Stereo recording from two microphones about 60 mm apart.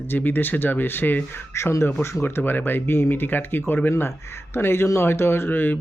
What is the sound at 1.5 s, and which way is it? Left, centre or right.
Speech, left.